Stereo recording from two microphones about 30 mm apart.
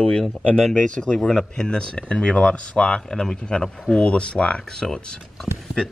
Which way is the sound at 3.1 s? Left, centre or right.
Left.